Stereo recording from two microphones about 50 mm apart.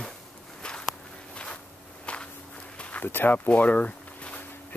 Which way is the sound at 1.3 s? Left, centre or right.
Left.